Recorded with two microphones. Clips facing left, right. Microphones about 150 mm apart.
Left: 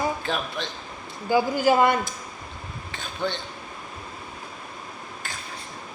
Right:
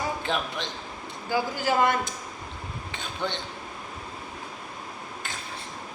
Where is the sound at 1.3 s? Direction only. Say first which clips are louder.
Left 6 dB; 15° left (ahead or behind).